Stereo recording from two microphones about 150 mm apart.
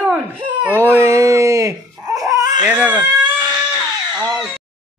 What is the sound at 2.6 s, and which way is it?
Speech, 10° right (ahead or behind).